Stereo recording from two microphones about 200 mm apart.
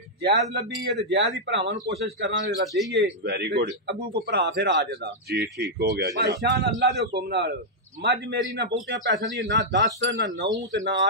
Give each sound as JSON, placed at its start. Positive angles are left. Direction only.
{"t": 0.2, "sound": "speech", "side_deg": -55}